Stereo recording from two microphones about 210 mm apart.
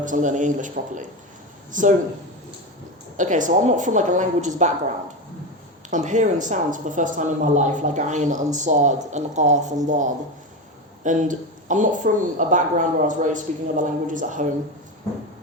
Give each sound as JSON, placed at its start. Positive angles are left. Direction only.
{"t": 0.0, "sound": "a woman's voice", "side_deg": -35}
{"t": 3.2, "sound": "a woman's voice", "side_deg": -35}
{"t": 5.9, "sound": "a woman's voice", "side_deg": -35}